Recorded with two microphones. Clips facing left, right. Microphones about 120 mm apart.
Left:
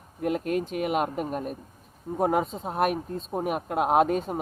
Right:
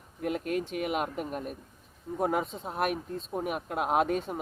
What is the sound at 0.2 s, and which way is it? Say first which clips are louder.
Speech: left 4 dB; 45° left (ahead or behind).